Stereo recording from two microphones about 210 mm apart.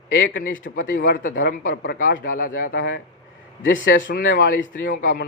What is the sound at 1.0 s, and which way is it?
Speech, 40° left (ahead or behind).